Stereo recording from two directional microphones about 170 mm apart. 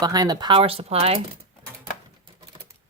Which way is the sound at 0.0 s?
20° right (ahead or behind).